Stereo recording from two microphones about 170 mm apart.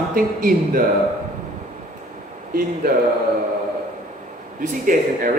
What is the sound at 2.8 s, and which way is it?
Speech, 65° right (ahead or behind).